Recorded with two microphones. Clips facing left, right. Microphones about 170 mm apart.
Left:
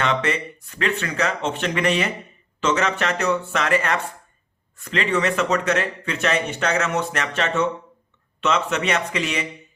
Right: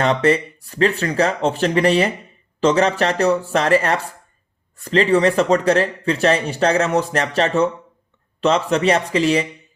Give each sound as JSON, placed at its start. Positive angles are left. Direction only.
{"t": 0.0, "sound": "speech", "side_deg": -35}